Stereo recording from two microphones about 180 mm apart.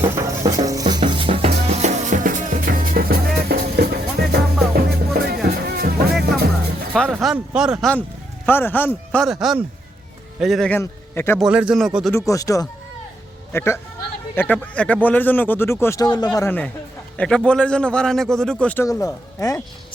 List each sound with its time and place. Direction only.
0.1 s music: 20° right (ahead or behind); by 5.9 s 60° right (ahead or behind)
6.9 s a man's voice: centre (ahead or behind)
9.2 s a man's voice: centre (ahead or behind)
10.7 s a man's voice: 10° left (ahead or behind)
11.3 s a man's voice: 5° right (ahead or behind)
12.1 s a man's voice: 15° left (ahead or behind)
18.9 s speech: 20° left (ahead or behind)